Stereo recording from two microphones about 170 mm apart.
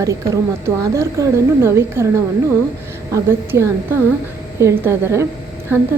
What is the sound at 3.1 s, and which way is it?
A woman's voice, 15° right (ahead or behind).